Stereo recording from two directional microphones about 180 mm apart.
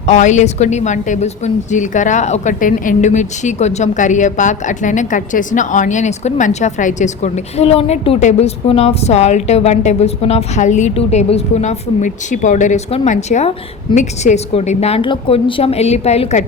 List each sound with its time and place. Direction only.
0.0 s speech: 40° left (ahead or behind)